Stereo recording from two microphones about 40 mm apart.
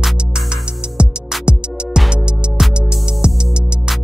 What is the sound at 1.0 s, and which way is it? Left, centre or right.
Music, right.